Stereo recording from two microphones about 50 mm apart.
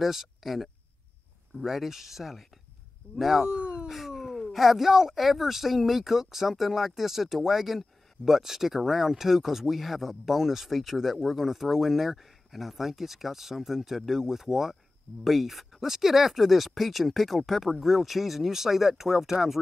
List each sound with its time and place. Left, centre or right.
0.0 s speech: centre
3.4 s a sound: right
3.9 s speech: centre